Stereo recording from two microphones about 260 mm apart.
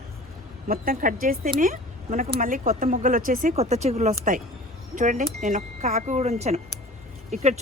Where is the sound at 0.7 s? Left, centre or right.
Right.